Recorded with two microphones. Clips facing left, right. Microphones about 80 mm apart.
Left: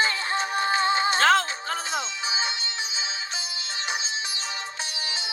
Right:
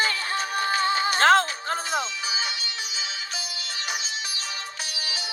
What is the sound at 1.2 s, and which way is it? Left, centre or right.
Music, right.